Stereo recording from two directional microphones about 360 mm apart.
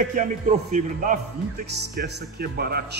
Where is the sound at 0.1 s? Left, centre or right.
Right.